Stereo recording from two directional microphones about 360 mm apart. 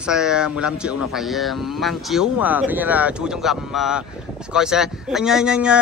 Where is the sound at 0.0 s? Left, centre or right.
Centre.